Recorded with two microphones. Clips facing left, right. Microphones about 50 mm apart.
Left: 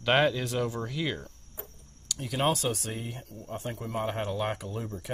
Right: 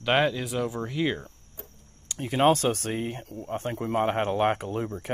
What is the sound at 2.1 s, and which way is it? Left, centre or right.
Speech, right.